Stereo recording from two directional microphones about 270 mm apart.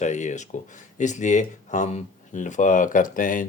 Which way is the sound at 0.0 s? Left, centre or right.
Left.